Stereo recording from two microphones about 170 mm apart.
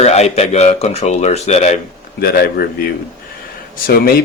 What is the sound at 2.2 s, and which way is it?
Speech, 65° left (ahead or behind).